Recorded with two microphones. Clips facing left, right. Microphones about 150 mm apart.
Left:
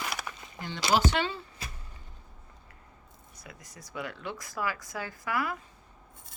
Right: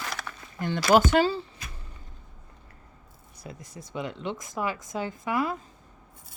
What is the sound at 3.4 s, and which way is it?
Speech, 25° right (ahead or behind).